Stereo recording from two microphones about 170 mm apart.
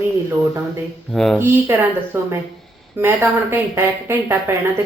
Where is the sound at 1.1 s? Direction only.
Centre (ahead or behind).